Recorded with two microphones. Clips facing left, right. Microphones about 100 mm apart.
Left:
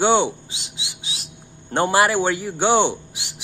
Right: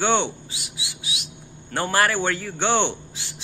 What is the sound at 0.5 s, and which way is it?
Speech, 25° left (ahead or behind).